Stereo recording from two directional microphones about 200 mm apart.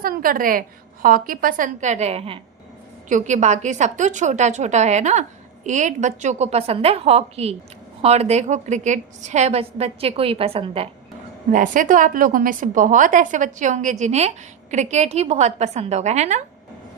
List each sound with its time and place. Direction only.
0.0 s a woman's voice: 45° right (ahead or behind); by 10.8 s 30° right (ahead or behind)
11.5 s a woman's voice: 40° right (ahead or behind)